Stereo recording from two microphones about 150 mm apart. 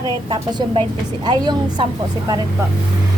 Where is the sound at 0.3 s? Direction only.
35° right (ahead or behind).